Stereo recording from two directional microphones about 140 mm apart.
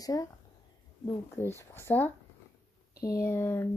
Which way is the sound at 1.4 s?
15° left (ahead or behind).